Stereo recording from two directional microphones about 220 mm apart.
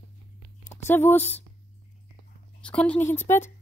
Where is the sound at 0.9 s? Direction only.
10° left (ahead or behind).